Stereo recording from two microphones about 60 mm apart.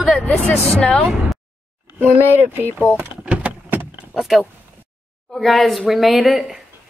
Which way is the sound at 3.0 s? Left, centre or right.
Right.